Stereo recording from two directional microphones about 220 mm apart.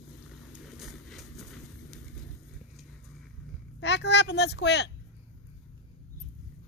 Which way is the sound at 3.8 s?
50° left (ahead or behind).